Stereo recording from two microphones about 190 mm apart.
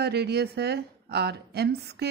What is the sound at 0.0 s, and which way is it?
A woman's voice, 60° right (ahead or behind).